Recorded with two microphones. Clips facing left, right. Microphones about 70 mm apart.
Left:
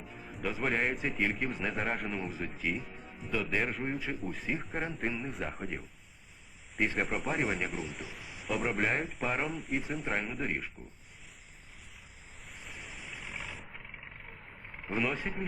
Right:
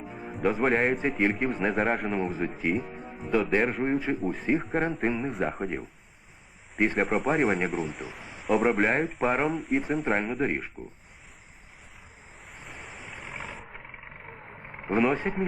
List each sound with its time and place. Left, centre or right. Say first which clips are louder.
0.3 s speech: right 9 dB; centre
4.3 s speech: right 11 dB; right
4.6 s speech: right 8 dB; centre
6.8 s speech: right 8 dB; centre
13.7 s vehicle: right 4 dB; right
15.3 s speech: right 8 dB; centre